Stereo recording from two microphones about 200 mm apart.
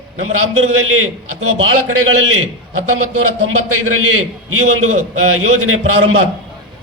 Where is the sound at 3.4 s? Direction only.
90° right.